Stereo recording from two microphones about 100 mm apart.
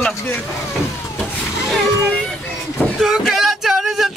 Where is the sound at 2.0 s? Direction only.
5° right (ahead or behind).